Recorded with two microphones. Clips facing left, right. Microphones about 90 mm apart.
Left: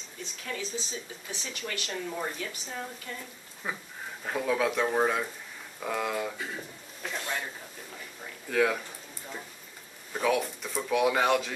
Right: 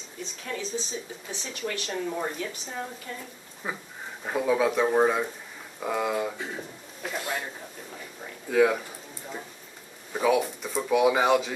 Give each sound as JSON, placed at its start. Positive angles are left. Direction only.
{"t": 0.5, "sound": "a woman's voice", "side_deg": 0}
{"t": 8.5, "sound": "speech", "side_deg": -5}
{"t": 10.1, "sound": "speech", "side_deg": -5}